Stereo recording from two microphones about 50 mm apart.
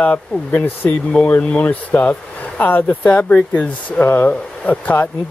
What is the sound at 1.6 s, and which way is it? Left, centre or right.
Speech, left.